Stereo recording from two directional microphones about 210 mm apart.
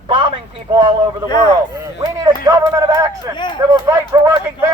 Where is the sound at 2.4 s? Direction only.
15° right (ahead or behind).